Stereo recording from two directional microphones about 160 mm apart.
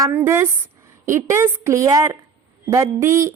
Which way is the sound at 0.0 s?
15° right (ahead or behind).